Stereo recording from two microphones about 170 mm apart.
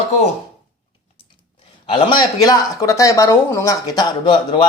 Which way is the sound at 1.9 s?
30° left (ahead or behind).